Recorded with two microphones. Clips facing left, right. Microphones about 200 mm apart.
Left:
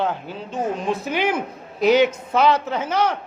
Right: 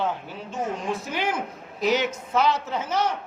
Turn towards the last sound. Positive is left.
turn(degrees=65)  # may be behind; listen again after turning